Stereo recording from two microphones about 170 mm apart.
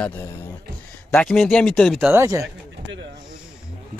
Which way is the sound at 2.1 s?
15° right (ahead or behind).